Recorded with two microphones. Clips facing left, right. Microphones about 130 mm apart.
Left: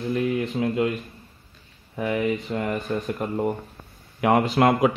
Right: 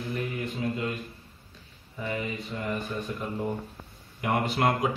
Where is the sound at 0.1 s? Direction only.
90° left.